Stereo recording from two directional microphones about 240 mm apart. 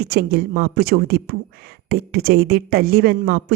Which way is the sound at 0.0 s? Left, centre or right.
Right.